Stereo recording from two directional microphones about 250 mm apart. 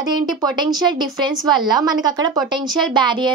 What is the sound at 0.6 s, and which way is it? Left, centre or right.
Speech, centre.